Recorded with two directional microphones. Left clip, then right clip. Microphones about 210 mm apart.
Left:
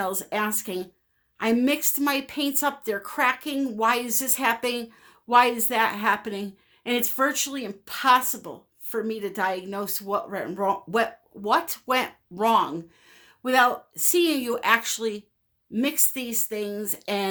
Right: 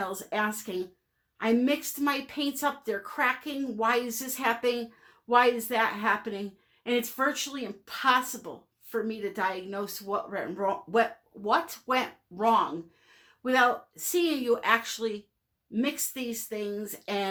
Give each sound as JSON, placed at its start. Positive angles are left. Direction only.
{"t": 0.0, "sound": "a woman's voice", "side_deg": 45}